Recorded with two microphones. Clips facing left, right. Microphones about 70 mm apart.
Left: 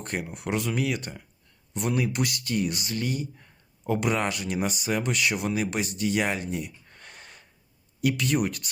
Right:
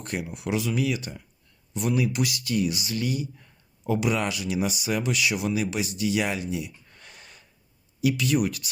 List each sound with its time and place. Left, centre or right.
0.0 s speech: left